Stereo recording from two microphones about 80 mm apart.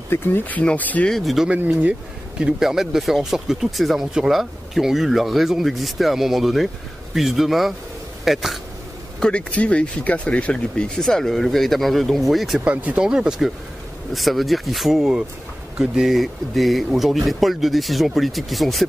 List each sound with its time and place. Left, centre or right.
0.1 s speech: left
1.1 s speech: centre
1.8 s speech: centre
9.2 s speech: centre
12.6 s speech: centre